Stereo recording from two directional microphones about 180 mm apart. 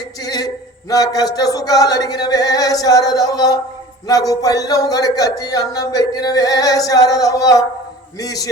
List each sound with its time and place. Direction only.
0.2 s speech: 20° left (ahead or behind)